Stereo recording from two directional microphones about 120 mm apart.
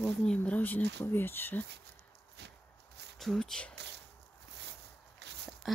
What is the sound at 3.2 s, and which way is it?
Speech, 5° left (ahead or behind).